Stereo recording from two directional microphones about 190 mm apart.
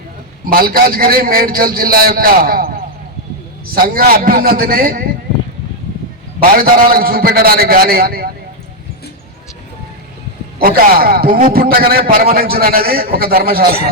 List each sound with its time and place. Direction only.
0.4 s a man's voice: 50° right (ahead or behind)
6.4 s a man's voice: 50° right (ahead or behind)
10.6 s a man's voice: 50° right (ahead or behind)